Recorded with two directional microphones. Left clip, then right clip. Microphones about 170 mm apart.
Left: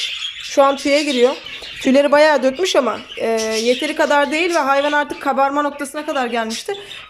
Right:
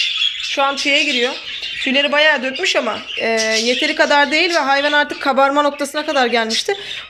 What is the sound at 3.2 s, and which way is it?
Speech, 15° left (ahead or behind).